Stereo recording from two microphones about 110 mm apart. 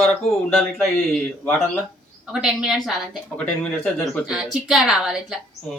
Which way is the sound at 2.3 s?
5° right (ahead or behind).